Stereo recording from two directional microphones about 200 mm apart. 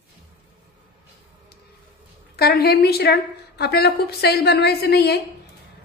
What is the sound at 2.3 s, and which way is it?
A woman's voice, 50° left (ahead or behind).